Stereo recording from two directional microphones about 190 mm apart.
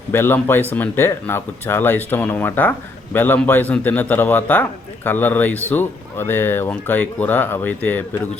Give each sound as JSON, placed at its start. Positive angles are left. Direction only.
{"t": 0.1, "sound": "speech", "side_deg": 10}